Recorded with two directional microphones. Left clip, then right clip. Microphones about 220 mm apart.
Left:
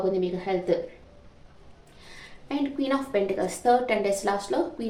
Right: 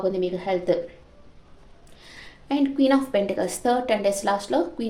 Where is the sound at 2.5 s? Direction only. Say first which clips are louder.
Right 6 dB; 45° right (ahead or behind).